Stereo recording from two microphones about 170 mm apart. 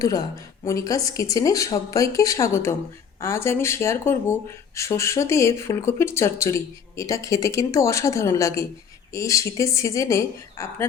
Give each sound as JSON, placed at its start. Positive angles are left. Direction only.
{"t": 0.0, "sound": "speech", "side_deg": 20}